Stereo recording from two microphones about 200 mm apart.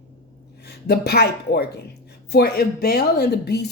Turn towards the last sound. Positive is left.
turn(degrees=55)  # may be behind; listen again after turning